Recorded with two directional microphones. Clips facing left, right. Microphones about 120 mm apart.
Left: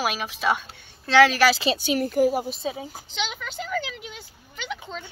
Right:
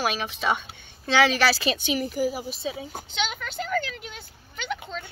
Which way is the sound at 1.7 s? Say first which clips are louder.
Left 3 dB; 40° left (ahead or behind).